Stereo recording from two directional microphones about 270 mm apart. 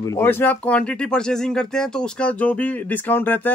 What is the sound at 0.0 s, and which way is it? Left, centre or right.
Speech, centre.